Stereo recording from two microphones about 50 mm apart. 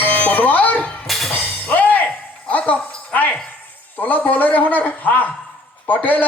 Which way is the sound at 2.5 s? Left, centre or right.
Left.